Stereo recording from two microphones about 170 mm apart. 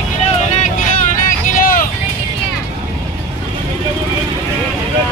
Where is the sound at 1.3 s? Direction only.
55° left (ahead or behind).